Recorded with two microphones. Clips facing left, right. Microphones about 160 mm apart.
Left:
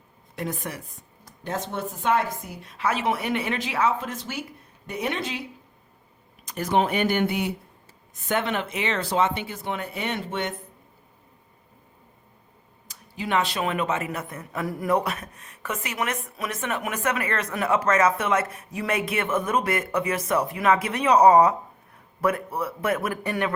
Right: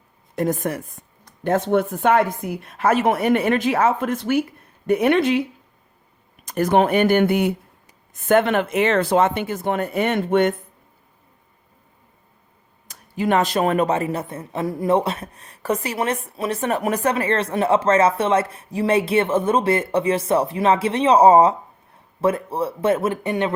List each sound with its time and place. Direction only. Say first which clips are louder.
0.3 s speech: right 9 dB; 45° right (ahead or behind)
1.5 s a woman's voice: right 11 dB; 60° right (ahead or behind)
6.4 s speech: right 6 dB; 50° right (ahead or behind)
12.9 s speech: right 6 dB; 50° right (ahead or behind); by 23.6 s 20° right (ahead or behind)